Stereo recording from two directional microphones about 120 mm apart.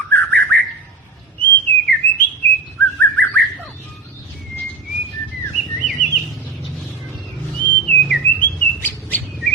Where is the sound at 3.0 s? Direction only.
15° left (ahead or behind).